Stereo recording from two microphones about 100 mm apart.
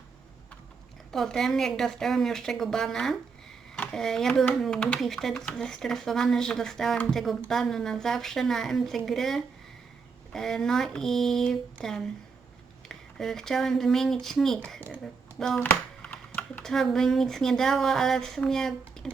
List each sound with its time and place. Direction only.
1.1 s speech: 5° left (ahead or behind)
14.8 s speech: 20° right (ahead or behind)
15.4 s speech: 5° left (ahead or behind)
15.6 s computer keyboard: 15° left (ahead or behind)
16.6 s speech: 5° left (ahead or behind)